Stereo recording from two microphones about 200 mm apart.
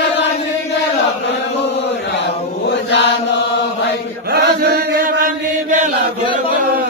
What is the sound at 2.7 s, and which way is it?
Mantra, 60° left (ahead or behind).